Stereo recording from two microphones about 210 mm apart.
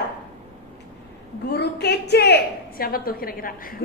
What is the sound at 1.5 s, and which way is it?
A woman's voice, 50° left (ahead or behind).